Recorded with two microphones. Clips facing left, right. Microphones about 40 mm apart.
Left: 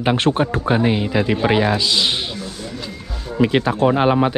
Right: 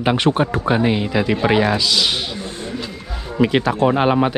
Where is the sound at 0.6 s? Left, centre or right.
Right.